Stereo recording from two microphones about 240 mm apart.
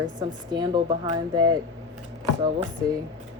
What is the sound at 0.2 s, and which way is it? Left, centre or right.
Speech, centre.